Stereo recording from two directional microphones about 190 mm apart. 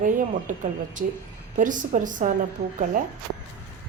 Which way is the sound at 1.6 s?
45° right (ahead or behind).